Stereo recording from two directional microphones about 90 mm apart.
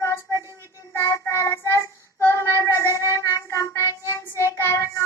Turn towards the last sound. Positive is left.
turn(degrees=30)  # may be behind; listen again after turning